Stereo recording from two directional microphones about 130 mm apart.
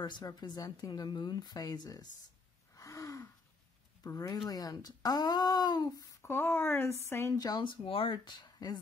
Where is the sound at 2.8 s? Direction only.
25° left (ahead or behind).